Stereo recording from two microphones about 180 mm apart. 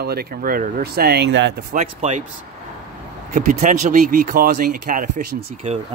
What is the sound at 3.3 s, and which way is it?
Speech, 45° right (ahead or behind).